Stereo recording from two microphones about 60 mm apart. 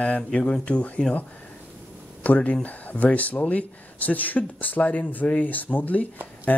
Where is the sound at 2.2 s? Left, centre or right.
Left.